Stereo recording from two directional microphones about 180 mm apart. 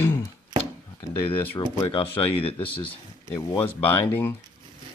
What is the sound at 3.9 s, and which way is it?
Speech, 10° left (ahead or behind).